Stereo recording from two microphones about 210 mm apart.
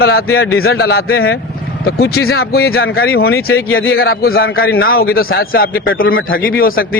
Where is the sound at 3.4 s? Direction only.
80° left.